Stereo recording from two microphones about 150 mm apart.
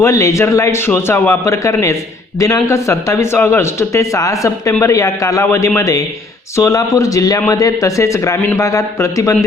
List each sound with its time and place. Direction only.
0.0 s a man's voice: 20° left (ahead or behind)